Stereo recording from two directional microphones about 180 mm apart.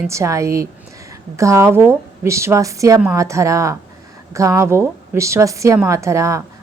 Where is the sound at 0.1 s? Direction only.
15° right (ahead or behind).